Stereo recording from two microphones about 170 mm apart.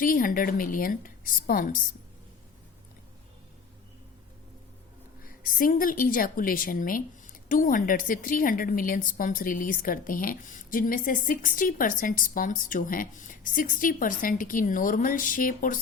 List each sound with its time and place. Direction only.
0.0 s a woman's voice: 55° left (ahead or behind)
5.2 s a woman's voice: 55° left (ahead or behind)